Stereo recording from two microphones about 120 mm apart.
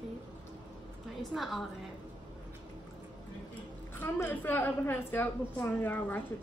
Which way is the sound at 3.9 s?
15° left (ahead or behind).